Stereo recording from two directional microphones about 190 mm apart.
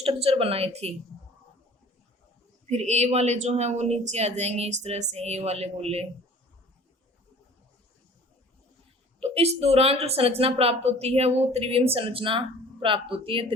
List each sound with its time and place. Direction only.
0.0 s speech: 30° right (ahead or behind)
2.6 s speech: 35° right (ahead or behind)
9.2 s speech: 35° right (ahead or behind)